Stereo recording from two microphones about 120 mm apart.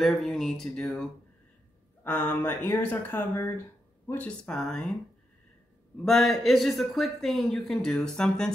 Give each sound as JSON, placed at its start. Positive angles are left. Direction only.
{"t": 0.0, "sound": "speech", "side_deg": 0}
{"t": 2.0, "sound": "speech", "side_deg": 15}
{"t": 6.0, "sound": "speech", "side_deg": 0}